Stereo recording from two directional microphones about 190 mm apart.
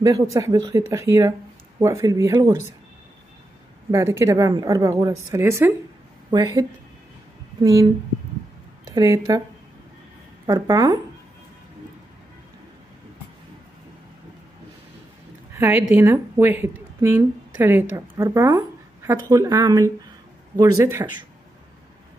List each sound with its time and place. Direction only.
0.0 s speech: 15° right (ahead or behind)
3.9 s speech: 15° right (ahead or behind)
8.8 s speech: 15° right (ahead or behind)
10.4 s speech: 20° right (ahead or behind)
15.5 s a sound: 10° right (ahead or behind)
15.9 s speech: 10° right (ahead or behind)